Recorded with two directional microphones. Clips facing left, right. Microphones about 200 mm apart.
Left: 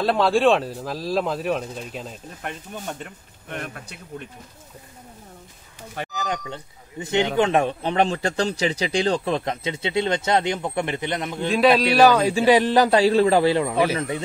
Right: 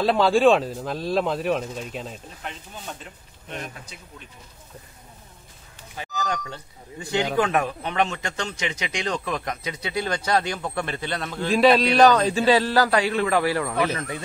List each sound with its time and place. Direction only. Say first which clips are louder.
0.0 s speech: right 1 dB; centre (ahead or behind)
2.4 s speech: left 5 dB; 55° left (ahead or behind)
6.1 s speech: right 2 dB; 20° left (ahead or behind)
11.4 s a man's voice: even; centre (ahead or behind); by 14.2 s 25° left (ahead or behind)